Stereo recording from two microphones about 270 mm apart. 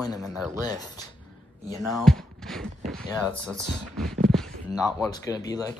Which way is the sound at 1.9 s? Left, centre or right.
Centre.